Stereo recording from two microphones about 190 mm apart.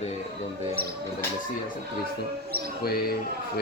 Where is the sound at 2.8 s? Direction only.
55° left (ahead or behind).